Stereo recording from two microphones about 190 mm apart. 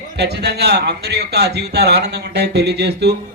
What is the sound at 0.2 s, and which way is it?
A man's voice, 60° right (ahead or behind).